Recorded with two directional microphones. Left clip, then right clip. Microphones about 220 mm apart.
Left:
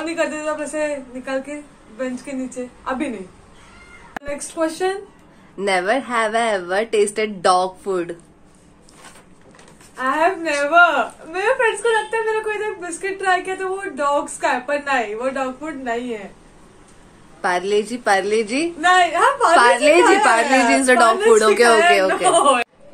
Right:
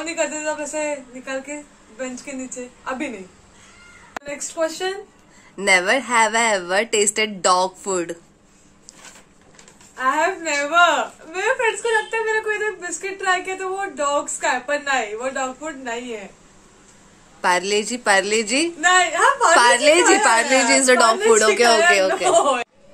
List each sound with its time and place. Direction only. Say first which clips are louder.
0.0 s a man's voice: left 2 dB; 5° right (ahead or behind)
4.2 s a man's voice: left 1 dB; centre (ahead or behind)
5.6 s speech: right 2 dB; 30° right (ahead or behind)
9.9 s speech: left 1 dB; 5° right (ahead or behind)
17.4 s speech: even; 30° right (ahead or behind)
18.8 s speech: left 2 dB; 10° right (ahead or behind)
19.5 s a woman's voice: left 2 dB; 30° right (ahead or behind); by 22.7 s 10° right (ahead or behind)